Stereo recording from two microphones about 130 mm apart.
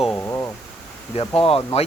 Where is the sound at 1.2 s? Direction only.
45° left (ahead or behind).